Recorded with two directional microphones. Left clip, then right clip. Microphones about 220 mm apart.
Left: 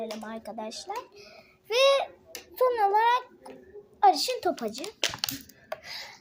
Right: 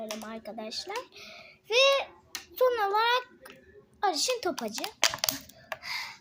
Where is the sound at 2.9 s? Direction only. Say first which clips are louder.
Left 3 dB; 20° right (ahead or behind).